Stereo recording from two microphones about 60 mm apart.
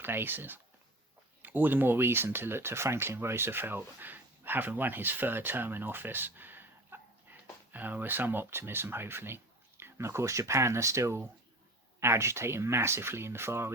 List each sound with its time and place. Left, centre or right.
0.0 s speech: right